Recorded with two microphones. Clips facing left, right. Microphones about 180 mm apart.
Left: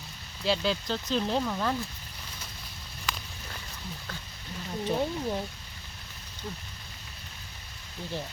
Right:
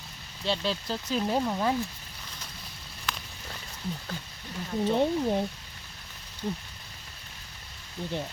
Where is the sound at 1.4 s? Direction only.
20° right (ahead or behind).